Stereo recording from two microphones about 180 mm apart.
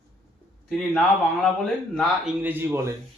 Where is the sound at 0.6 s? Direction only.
Centre (ahead or behind).